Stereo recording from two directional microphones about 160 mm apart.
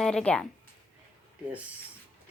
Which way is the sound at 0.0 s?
5° left (ahead or behind).